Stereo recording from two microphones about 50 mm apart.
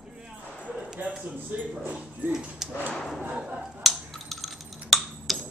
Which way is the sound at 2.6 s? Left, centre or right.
Centre.